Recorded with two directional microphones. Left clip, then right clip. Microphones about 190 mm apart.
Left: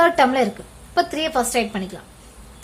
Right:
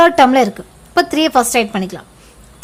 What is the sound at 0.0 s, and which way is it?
A woman's voice, 30° right (ahead or behind).